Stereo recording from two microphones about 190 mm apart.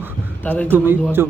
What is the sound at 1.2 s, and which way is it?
Speech, 15° right (ahead or behind).